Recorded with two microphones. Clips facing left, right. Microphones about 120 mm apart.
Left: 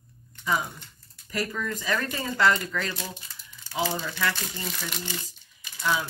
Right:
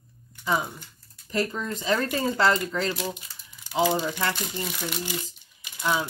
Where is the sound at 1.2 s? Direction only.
25° right (ahead or behind).